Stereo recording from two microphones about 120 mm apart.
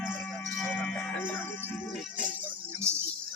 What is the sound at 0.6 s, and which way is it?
Music, 10° left (ahead or behind).